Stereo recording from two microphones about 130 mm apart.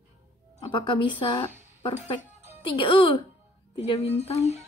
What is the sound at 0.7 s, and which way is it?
Speech, 40° left (ahead or behind).